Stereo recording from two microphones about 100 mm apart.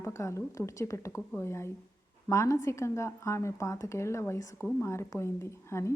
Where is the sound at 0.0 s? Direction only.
30° left (ahead or behind).